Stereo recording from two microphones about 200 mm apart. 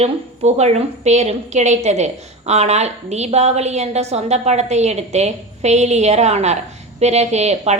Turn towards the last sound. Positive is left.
turn(degrees=-35)  # may be behind; listen again after turning